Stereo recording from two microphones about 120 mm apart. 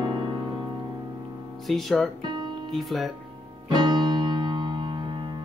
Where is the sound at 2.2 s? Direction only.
40° right (ahead or behind).